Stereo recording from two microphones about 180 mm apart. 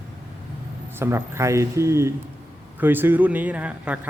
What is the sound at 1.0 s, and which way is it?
Speech, 15° right (ahead or behind).